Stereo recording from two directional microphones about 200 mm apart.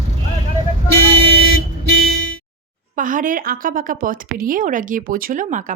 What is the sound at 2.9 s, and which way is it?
Speech, 40° right (ahead or behind).